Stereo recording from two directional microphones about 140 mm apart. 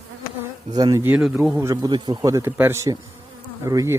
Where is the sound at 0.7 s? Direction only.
25° right (ahead or behind).